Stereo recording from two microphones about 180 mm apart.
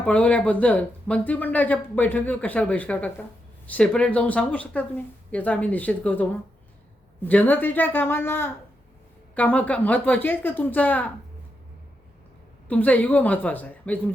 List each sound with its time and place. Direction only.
0.0 s speech: 5° left (ahead or behind)
12.6 s speech: 10° left (ahead or behind)